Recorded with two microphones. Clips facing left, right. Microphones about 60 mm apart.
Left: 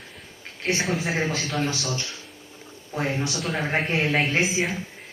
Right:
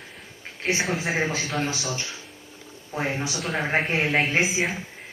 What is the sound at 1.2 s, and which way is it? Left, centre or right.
A man's voice, centre.